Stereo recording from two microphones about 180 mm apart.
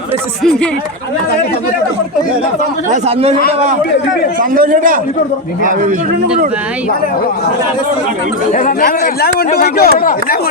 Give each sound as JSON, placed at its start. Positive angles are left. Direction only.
{"t": 2.9, "sound": "a man's voice", "side_deg": -35}
{"t": 4.4, "sound": "a man's voice", "side_deg": -50}
{"t": 8.5, "sound": "a man's voice", "side_deg": 50}